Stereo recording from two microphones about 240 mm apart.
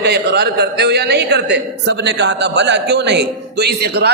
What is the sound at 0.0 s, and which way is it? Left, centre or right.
A woman's voice, right.